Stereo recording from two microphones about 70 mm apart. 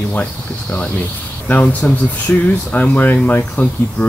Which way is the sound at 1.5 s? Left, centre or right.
Left.